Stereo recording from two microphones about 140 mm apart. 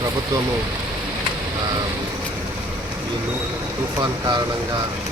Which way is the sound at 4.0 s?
25° right (ahead or behind).